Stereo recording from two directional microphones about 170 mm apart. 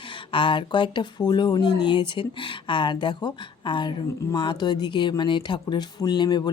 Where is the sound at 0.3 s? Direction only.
30° left (ahead or behind).